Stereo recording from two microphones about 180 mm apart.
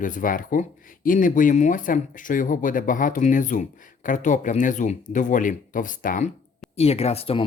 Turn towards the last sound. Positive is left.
turn(degrees=30)  # may be behind; listen again after turning